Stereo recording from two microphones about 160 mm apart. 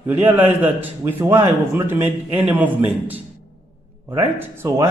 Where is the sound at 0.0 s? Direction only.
10° right (ahead or behind).